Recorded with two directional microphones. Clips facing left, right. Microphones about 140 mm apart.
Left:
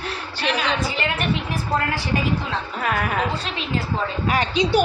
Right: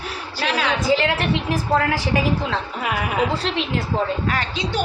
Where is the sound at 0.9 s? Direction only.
90° right.